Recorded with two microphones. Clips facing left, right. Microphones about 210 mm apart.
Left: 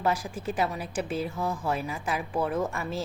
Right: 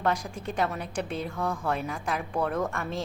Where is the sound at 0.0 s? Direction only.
5° left (ahead or behind).